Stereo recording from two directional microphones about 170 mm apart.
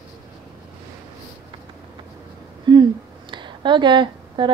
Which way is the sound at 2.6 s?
25° right (ahead or behind).